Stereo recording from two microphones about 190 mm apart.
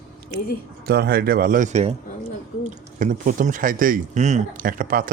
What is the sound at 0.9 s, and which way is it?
Speech, 55° right (ahead or behind).